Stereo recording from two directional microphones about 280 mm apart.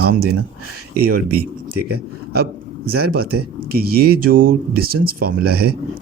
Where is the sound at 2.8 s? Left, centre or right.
Right.